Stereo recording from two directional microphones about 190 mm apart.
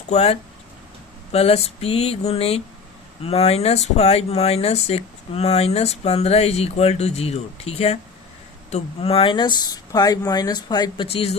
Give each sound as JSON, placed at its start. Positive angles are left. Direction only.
{"t": 0.1, "sound": "speech", "side_deg": 35}